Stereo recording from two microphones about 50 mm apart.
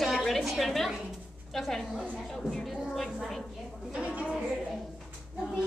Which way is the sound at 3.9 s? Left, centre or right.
Right.